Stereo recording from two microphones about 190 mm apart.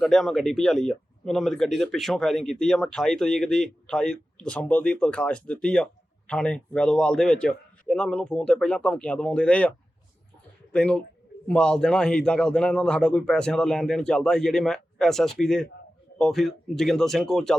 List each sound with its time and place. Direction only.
0.0 s a man's voice: centre (ahead or behind)